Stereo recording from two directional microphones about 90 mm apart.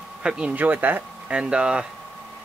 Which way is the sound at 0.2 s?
10° right (ahead or behind).